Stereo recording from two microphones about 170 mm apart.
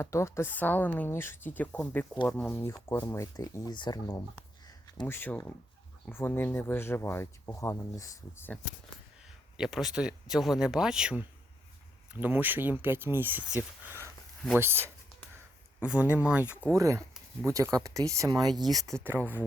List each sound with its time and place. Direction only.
0.0 s speech: 15° left (ahead or behind)
4.6 s a sound: 25° left (ahead or behind)
5.0 s speech: 10° left (ahead or behind)
9.6 s speech: centre (ahead or behind)
14.6 s speech: 15° right (ahead or behind)
19.2 s speech: 10° left (ahead or behind)